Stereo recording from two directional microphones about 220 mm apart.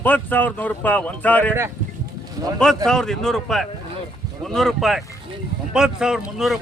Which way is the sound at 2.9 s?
Centre (ahead or behind).